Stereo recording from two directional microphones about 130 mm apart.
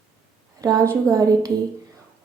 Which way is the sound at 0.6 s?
30° right (ahead or behind).